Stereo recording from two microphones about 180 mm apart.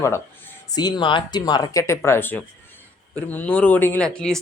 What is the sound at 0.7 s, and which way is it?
Speech, 20° left (ahead or behind).